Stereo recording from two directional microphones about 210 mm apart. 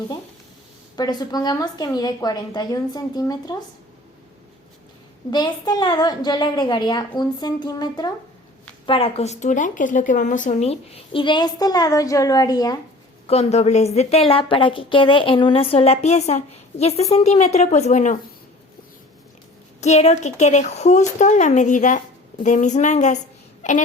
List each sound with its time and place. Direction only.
0.9 s speech: 20° left (ahead or behind)
5.3 s speech: 20° left (ahead or behind)
13.2 s a woman's voice: 30° left (ahead or behind)
19.8 s a woman's voice: 30° left (ahead or behind)